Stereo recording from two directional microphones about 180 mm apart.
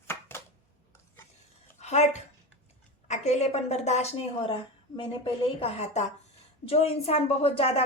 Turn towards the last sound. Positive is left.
turn(degrees=35)  # may be behind; listen again after turning